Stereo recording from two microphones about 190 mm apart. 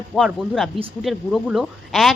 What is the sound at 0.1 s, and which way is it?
Speech, centre (ahead or behind).